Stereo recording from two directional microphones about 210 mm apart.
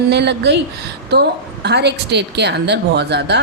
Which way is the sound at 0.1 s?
55° right (ahead or behind).